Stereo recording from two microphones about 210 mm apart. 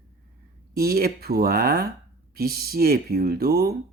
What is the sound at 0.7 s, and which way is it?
Speech, 45° right (ahead or behind).